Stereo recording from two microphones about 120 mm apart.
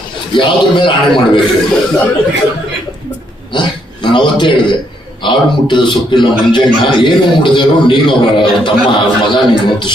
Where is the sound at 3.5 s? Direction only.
40° left (ahead or behind).